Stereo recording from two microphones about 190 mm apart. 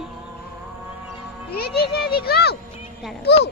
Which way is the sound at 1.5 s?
55° left (ahead or behind).